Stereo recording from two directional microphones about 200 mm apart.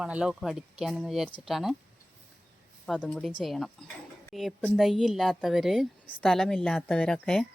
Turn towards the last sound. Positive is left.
turn(degrees=5)  # may be behind; listen again after turning